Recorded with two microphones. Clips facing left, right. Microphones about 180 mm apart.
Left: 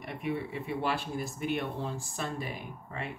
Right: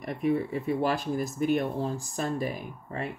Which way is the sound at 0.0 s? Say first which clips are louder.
Right 7 dB; 40° right (ahead or behind).